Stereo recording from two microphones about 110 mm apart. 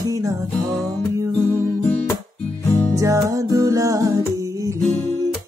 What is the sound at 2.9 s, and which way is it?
Music, 30° right (ahead or behind).